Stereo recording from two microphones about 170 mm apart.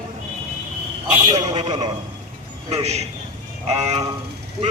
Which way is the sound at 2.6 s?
40° right (ahead or behind).